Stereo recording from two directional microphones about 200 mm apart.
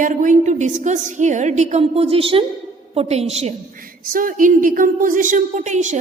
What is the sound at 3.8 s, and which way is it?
A woman's voice, 45° right (ahead or behind).